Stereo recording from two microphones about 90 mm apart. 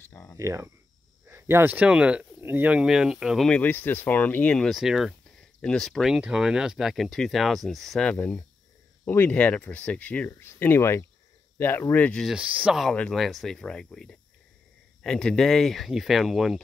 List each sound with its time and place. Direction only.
0.0 s cricket: 25° left (ahead or behind)
0.4 s speech: 35° right (ahead or behind); by 3.4 s 5° right (ahead or behind)
3.4 s speech: 15° left (ahead or behind)
4.6 s speech: 5° right (ahead or behind)
5.6 s speech: 10° left (ahead or behind)
6.0 s speech: 5° right (ahead or behind)
8.1 s speech: 15° left (ahead or behind)
12.4 s speech: 15° right (ahead or behind)
12.9 s speech: 10° left (ahead or behind)
13.2 s speech: centre (ahead or behind)